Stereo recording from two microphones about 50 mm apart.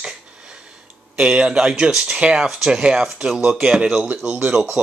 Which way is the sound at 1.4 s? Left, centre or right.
Centre.